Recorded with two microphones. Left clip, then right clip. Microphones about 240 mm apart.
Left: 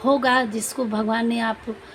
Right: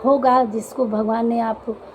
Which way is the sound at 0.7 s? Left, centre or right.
Left.